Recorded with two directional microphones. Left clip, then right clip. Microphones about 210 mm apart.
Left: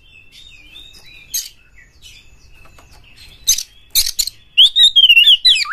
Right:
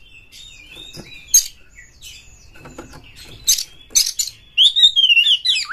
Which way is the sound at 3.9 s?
40° left (ahead or behind).